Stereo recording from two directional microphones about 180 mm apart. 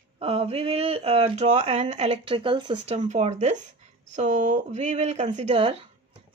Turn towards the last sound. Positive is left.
turn(degrees=-30)  # may be behind; listen again after turning